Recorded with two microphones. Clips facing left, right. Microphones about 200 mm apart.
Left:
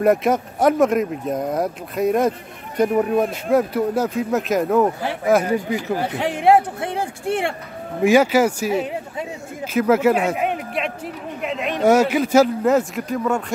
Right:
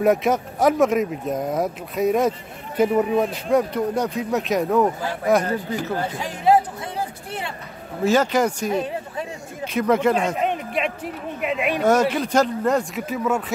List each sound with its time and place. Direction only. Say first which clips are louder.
0.0 s speech: left 2 dB; centre (ahead or behind)
5.5 s speech: left 3 dB; 15° left (ahead or behind)
6.0 s speech: left 4 dB; 65° left (ahead or behind)
8.0 s speech: left 4 dB; 10° left (ahead or behind)
11.4 s speech: right 2 dB; 5° right (ahead or behind)
11.8 s speech: left 4 dB; 10° left (ahead or behind)